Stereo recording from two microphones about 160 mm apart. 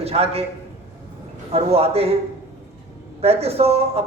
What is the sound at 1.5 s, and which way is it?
Speech, 40° right (ahead or behind).